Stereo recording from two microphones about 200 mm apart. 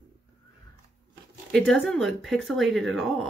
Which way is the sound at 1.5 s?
Centre (ahead or behind).